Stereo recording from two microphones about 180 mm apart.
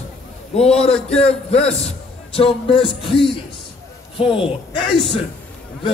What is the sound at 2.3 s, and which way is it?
Music, 30° left (ahead or behind).